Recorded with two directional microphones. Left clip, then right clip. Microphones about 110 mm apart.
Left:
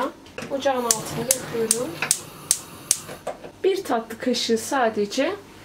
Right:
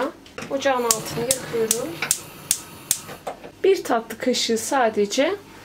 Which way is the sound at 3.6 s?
40° right (ahead or behind).